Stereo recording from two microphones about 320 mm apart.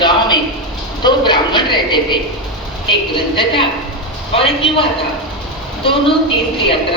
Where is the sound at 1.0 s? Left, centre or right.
Centre.